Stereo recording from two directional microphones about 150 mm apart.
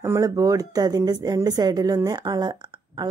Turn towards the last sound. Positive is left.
turn(degrees=-30)  # may be behind; listen again after turning